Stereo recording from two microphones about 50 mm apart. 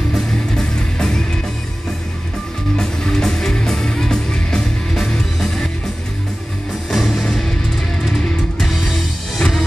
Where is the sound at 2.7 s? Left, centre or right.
Centre.